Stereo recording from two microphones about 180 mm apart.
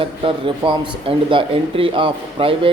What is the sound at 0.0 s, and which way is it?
Speech, 30° right (ahead or behind).